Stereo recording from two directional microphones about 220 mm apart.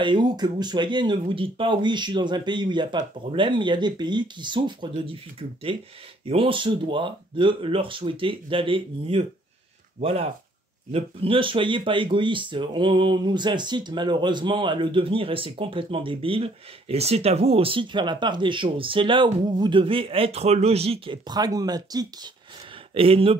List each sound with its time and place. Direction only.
0.0 s speech: 20° right (ahead or behind)